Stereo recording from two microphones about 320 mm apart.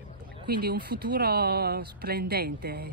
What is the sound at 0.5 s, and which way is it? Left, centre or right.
Speech, right.